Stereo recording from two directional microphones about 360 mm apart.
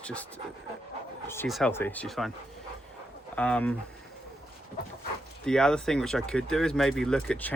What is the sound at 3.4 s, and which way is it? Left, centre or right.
Speech, centre.